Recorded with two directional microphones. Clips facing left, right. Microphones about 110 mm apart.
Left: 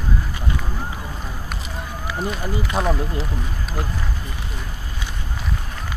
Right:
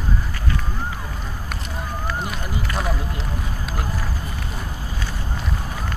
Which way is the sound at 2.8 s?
5° left (ahead or behind).